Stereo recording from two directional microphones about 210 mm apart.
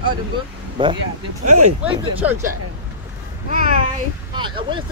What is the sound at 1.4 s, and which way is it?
Speech, 90° right.